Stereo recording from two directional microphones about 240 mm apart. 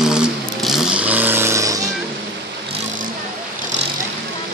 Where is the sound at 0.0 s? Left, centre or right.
Centre.